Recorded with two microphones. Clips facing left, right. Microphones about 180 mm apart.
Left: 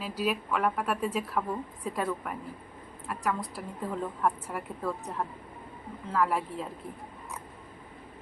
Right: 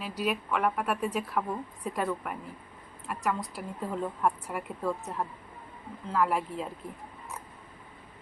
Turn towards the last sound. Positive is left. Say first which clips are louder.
# even
turn(degrees=0)  # may be behind; listen again after turning